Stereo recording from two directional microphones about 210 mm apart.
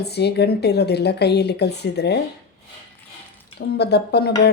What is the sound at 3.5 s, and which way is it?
Speech, 50° left (ahead or behind).